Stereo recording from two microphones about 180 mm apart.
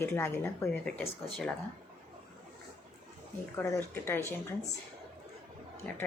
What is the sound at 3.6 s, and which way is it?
Speech, 15° left (ahead or behind).